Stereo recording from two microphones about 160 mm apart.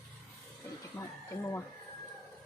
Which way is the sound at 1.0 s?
20° left (ahead or behind).